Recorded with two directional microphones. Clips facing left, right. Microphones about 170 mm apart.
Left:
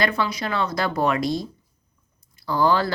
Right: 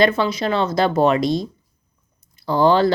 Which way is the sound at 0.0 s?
25° right (ahead or behind).